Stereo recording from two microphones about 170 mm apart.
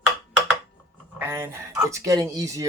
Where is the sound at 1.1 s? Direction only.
15° right (ahead or behind).